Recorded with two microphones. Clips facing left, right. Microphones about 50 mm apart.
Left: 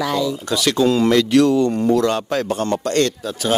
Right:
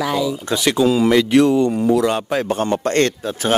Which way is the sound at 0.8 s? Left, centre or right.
Centre.